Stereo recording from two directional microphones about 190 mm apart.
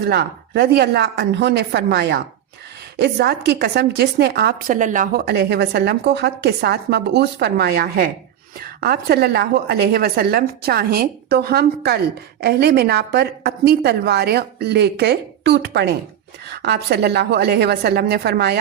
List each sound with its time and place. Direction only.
0.0 s a woman's voice: 55° right (ahead or behind)